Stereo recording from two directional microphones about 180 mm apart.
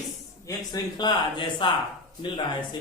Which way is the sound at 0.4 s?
20° left (ahead or behind).